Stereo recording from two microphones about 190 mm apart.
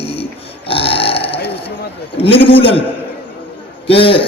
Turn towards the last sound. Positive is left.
turn(degrees=30)  # may be behind; listen again after turning